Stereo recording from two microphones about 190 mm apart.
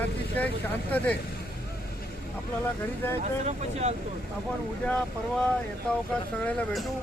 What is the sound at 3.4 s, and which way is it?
Speech, 35° right (ahead or behind).